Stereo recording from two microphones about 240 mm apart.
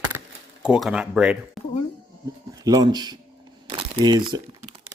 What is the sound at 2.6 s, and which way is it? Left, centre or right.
Speech, centre.